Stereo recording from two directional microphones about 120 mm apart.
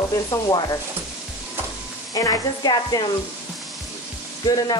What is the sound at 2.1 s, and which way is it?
Speech, 30° left (ahead or behind).